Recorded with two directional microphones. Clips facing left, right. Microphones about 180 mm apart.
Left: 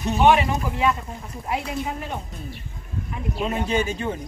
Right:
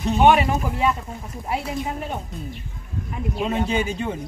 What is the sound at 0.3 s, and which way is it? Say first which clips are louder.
Speech: right 1 dB; centre (ahead or behind).